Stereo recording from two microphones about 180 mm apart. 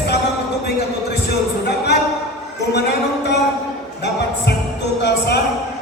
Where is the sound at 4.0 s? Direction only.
70° left (ahead or behind).